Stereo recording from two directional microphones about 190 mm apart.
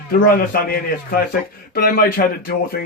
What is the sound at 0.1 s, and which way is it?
Speech, 50° left (ahead or behind).